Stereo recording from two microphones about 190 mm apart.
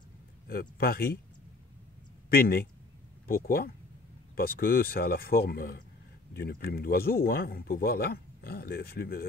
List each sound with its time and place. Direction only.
0.5 s speech: 50° left (ahead or behind)
2.2 s speech: 55° left (ahead or behind)